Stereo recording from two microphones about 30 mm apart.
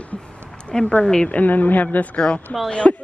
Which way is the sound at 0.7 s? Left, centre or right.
Left.